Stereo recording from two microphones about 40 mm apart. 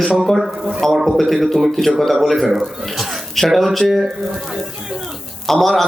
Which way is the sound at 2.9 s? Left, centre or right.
Centre.